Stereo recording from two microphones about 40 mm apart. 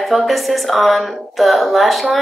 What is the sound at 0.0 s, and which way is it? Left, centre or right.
A woman's voice, centre.